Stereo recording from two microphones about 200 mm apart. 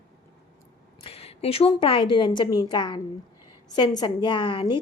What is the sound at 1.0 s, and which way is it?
A woman's voice, 30° left (ahead or behind).